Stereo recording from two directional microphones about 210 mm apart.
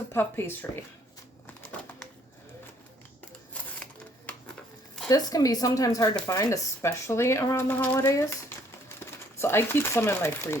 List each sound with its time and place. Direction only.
0.1 s speech: 10° left (ahead or behind)
4.3 s a sound: 5° left (ahead or behind)
5.0 s speech: 15° left (ahead or behind)